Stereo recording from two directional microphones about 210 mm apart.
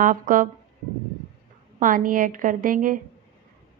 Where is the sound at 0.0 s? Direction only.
40° right (ahead or behind).